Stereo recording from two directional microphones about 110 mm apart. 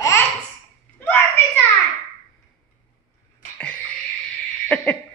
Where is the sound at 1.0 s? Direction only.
15° left (ahead or behind).